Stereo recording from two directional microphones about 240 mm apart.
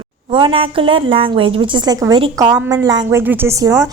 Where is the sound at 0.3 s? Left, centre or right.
Centre.